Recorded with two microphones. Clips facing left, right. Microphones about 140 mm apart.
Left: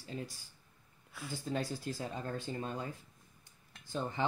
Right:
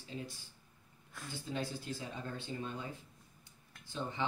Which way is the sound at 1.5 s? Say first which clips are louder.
Left 3 dB; 40° left (ahead or behind).